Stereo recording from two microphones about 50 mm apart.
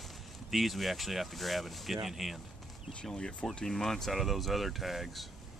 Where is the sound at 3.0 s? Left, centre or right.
Centre.